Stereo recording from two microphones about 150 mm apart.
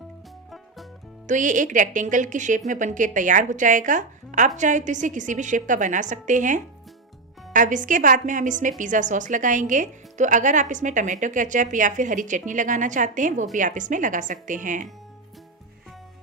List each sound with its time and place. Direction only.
1.3 s a woman's voice: 60° right (ahead or behind)